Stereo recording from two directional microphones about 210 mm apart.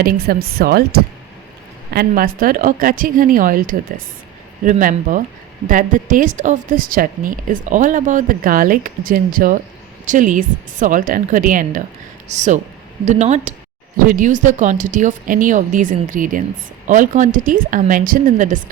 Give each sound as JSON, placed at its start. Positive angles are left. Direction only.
{"t": 0.0, "sound": "speech", "side_deg": -45}
{"t": 1.9, "sound": "speech", "side_deg": -45}